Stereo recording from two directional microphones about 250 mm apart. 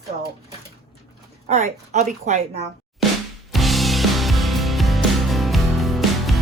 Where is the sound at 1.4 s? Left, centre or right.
Right.